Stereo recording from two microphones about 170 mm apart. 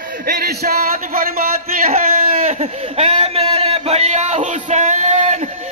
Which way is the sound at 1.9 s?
40° right (ahead or behind).